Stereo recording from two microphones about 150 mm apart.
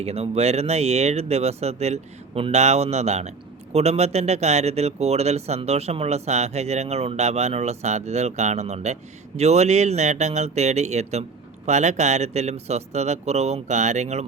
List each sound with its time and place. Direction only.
0.0 s speech: 45° right (ahead or behind)